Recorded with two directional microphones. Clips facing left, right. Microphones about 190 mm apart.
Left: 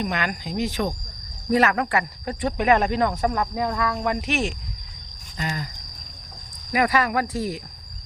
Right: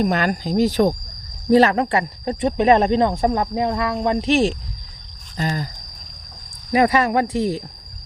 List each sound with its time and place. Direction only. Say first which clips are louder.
0.0 s speech: right 7 dB; 40° right (ahead or behind)
6.7 s speech: right 5 dB; 25° right (ahead or behind)